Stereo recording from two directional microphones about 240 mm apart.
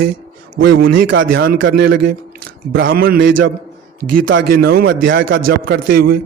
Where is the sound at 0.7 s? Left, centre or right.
Right.